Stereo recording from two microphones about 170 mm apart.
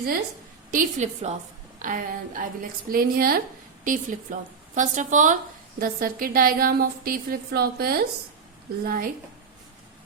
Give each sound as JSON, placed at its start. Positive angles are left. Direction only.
{"t": 0.7, "sound": "a woman's voice", "side_deg": -50}
{"t": 3.8, "sound": "a woman's voice", "side_deg": -50}